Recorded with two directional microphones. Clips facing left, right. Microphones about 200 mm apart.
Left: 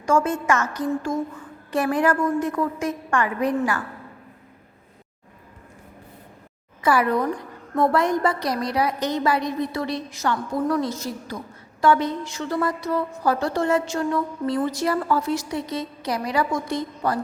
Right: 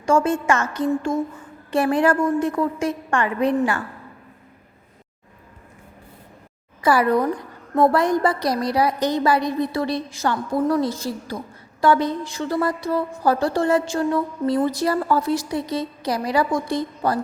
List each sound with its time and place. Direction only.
0.0 s a woman's voice: 30° right (ahead or behind)
6.8 s a woman's voice: 35° right (ahead or behind)